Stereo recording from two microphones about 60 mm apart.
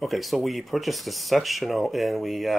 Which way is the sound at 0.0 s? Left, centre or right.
Centre.